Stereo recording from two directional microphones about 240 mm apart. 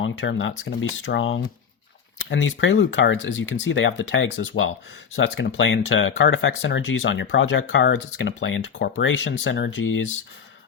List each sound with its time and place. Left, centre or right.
0.0 s speech: left